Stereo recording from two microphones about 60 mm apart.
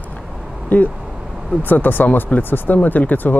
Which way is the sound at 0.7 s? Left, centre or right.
Left.